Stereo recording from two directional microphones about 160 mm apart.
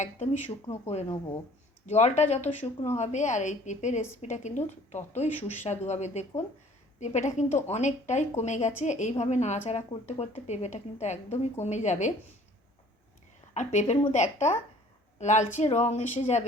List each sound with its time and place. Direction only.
0.7 s a woman's voice: 40° left (ahead or behind)
13.5 s a woman's voice: 45° left (ahead or behind)